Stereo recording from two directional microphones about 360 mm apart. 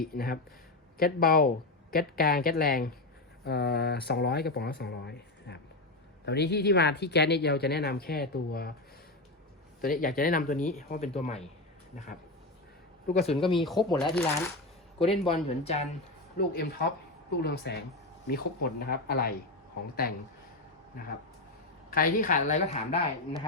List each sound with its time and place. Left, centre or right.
0.1 s speech: left
9.8 s speech: left
13.1 s speech: centre
13.6 s a man's voice: centre; by 20.2 s left
21.8 s speech: left